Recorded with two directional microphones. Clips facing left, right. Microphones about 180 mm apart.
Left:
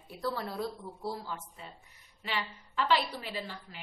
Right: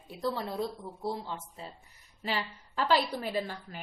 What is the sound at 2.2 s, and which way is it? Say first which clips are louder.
A woman's voice: right 3 dB; 40° right (ahead or behind).